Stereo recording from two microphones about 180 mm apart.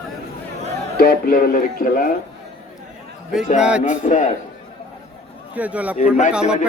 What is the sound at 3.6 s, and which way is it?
Speech, 5° right (ahead or behind).